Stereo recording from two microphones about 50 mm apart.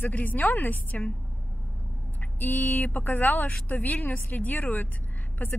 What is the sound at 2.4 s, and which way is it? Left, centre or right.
Speech, left.